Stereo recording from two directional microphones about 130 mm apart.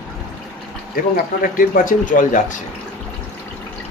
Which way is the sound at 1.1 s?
90° left.